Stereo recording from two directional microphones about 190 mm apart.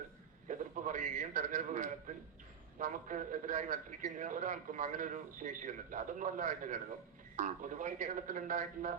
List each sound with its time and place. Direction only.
0.4 s a man's voice: 45° right (ahead or behind)